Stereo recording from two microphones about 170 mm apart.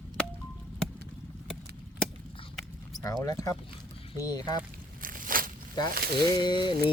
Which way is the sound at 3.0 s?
20° left (ahead or behind).